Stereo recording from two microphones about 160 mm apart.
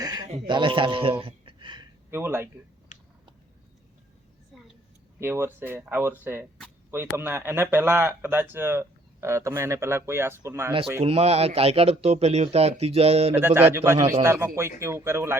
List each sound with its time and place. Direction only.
0.0 s a sound: 25° right (ahead or behind)
0.4 s a man's voice: 30° right (ahead or behind)
2.0 s speech: 15° right (ahead or behind)
4.5 s vehicle: centre (ahead or behind)
5.2 s speech: 15° right (ahead or behind)
11.0 s a man's voice: 40° right (ahead or behind)
13.4 s speech: 15° right (ahead or behind)